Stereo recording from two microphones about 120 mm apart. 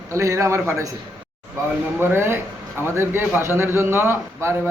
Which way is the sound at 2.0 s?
20° right (ahead or behind).